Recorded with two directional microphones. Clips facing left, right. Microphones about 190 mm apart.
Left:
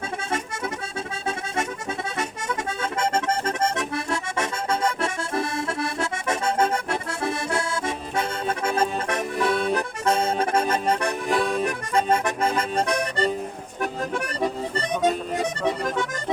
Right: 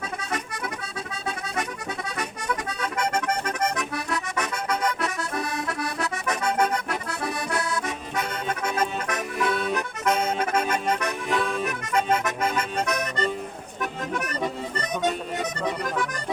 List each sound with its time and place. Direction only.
2.1 s accordion: 25° left (ahead or behind)
14.8 s music: 30° left (ahead or behind)